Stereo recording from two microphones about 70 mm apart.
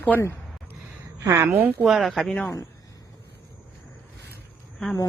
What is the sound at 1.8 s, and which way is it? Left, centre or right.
Speech, centre.